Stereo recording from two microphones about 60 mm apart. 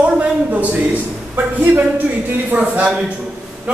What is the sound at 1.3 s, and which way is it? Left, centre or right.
Speech, right.